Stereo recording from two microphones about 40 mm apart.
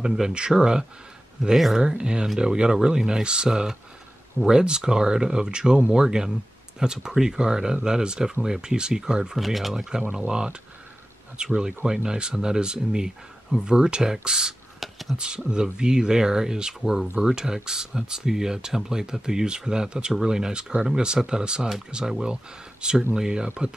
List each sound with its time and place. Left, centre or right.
0.0 s speech: centre
9.4 s speech: centre
10.2 s speech: right
14.8 s a sound: centre
15.1 s speech: right